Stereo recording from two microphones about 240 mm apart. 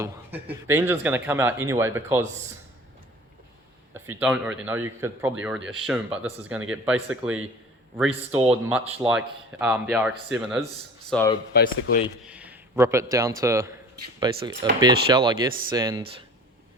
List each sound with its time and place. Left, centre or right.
0.0 s speech: centre
4.1 s speech: centre
7.9 s speech: centre
11.1 s speech: centre
11.5 s speech: left
12.3 s a sound: centre
13.4 s speech: centre